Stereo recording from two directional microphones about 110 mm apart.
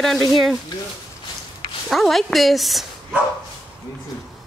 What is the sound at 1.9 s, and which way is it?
Speech, centre (ahead or behind).